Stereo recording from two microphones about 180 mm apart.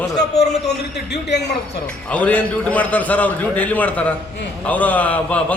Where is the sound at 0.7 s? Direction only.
70° left (ahead or behind).